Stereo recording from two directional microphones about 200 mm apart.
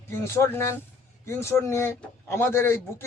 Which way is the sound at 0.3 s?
10° left (ahead or behind).